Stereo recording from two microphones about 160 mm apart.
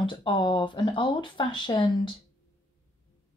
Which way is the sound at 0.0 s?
30° left (ahead or behind).